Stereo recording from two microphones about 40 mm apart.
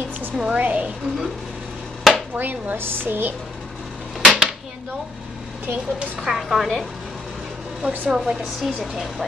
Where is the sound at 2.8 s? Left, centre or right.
Right.